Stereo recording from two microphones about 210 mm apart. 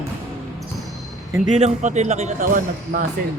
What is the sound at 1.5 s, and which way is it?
Speech, 35° right (ahead or behind).